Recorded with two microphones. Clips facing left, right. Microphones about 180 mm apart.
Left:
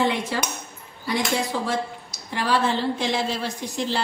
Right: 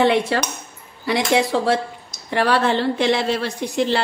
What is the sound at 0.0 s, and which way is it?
A woman's voice, 70° right (ahead or behind).